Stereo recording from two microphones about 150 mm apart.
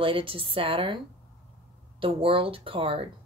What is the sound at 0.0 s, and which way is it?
Speech, 35° right (ahead or behind).